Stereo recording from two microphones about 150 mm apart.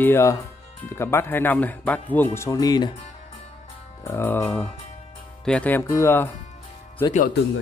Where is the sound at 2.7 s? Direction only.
30° left (ahead or behind).